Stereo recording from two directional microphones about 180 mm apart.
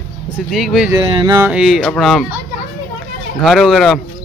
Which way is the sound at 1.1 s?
30° right (ahead or behind).